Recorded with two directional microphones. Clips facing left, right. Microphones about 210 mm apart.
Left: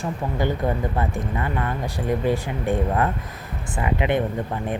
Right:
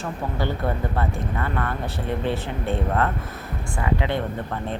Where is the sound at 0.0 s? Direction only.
15° left (ahead or behind).